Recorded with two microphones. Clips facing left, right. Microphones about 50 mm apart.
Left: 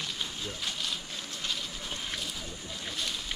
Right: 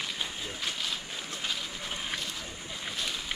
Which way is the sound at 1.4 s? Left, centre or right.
Centre.